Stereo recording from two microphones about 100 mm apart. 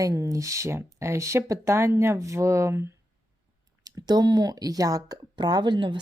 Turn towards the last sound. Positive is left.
turn(degrees=-50)  # may be behind; listen again after turning